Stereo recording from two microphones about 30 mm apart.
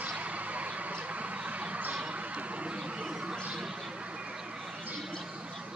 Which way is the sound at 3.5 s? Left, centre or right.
Right.